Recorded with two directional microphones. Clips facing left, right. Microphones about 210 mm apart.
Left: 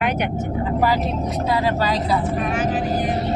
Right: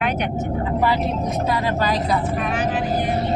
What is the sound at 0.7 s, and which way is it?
Speech, 40° left (ahead or behind).